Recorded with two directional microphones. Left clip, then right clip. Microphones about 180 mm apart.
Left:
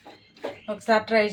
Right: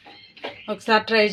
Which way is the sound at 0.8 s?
55° right (ahead or behind).